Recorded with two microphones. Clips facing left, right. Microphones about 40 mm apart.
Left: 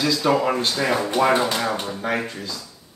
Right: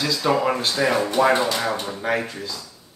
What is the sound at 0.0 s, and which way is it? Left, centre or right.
Speech, centre.